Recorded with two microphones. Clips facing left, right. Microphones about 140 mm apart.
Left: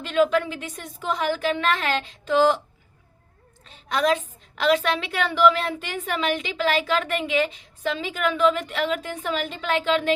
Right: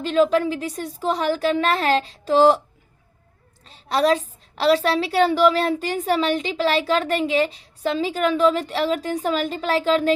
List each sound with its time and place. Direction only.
0.0 s a woman's voice: 35° right (ahead or behind)
3.7 s a woman's voice: 35° right (ahead or behind)